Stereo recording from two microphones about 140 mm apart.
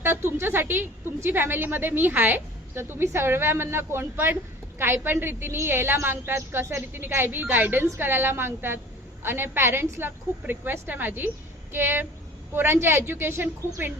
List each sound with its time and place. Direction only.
0.0 s a woman's voice: 15° right (ahead or behind)